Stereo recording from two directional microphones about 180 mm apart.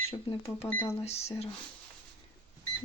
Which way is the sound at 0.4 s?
15° left (ahead or behind).